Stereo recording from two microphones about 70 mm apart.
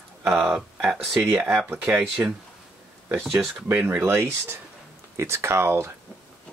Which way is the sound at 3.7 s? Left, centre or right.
Right.